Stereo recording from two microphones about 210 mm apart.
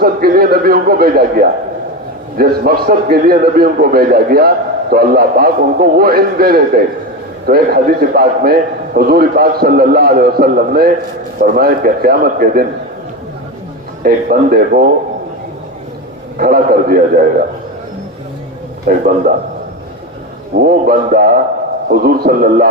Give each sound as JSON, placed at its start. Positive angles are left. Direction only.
{"t": 0.0, "sound": "a man's voice", "side_deg": -45}
{"t": 14.0, "sound": "a man's voice", "side_deg": -45}
{"t": 16.4, "sound": "a man's voice", "side_deg": -45}
{"t": 18.9, "sound": "a man's voice", "side_deg": -40}
{"t": 20.7, "sound": "a man's voice", "side_deg": -45}